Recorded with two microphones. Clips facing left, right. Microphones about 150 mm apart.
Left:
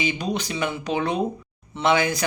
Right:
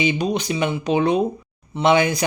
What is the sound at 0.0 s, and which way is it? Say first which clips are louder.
Speech: right 5 dB; 20° right (ahead or behind).